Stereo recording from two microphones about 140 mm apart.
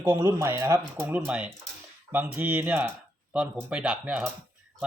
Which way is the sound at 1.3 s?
10° right (ahead or behind).